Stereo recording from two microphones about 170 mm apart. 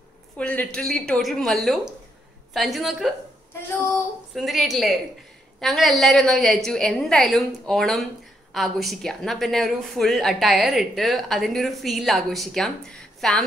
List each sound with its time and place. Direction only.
0.4 s a woman's voice: 5° left (ahead or behind)
4.4 s a woman's voice: centre (ahead or behind)